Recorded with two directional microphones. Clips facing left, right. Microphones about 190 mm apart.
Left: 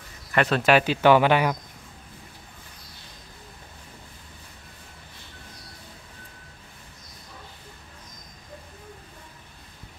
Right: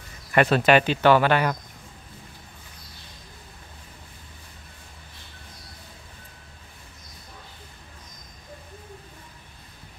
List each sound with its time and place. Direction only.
0.3 s speech: 10° right (ahead or behind)
0.6 s speech: centre (ahead or behind)
1.0 s speech: 15° left (ahead or behind)